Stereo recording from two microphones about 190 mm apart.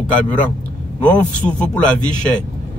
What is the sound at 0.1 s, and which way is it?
A man's voice, 10° left (ahead or behind).